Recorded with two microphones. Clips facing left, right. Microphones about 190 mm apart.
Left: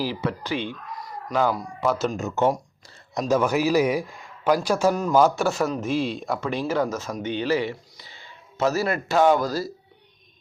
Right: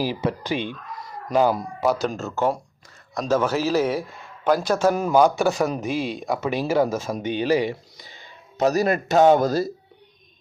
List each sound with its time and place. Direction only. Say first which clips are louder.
0.3 s speech: right 2 dB; 15° right (ahead or behind)
1.9 s speech: right 1 dB; centre (ahead or behind)
2.1 s a man's voice: left 1 dB; 20° left (ahead or behind)
4.9 s speech: right 1 dB; 5° right (ahead or behind)
8.0 s a sound: right 1 dB; 15° right (ahead or behind)
9.2 s speech: right 4 dB; 20° right (ahead or behind)